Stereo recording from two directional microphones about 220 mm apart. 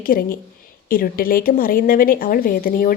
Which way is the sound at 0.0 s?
40° left (ahead or behind).